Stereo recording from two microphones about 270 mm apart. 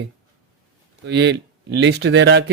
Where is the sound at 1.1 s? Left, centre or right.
Right.